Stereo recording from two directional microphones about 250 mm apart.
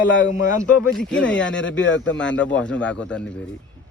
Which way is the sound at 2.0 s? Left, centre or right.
Centre.